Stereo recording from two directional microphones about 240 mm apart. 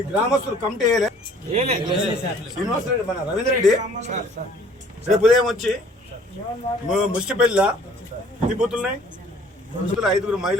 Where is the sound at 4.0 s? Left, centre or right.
Right.